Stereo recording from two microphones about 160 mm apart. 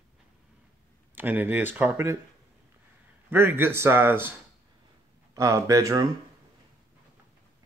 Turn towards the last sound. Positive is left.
turn(degrees=-25)  # may be behind; listen again after turning